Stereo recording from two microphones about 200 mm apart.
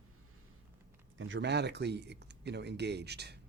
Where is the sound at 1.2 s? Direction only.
65° right (ahead or behind).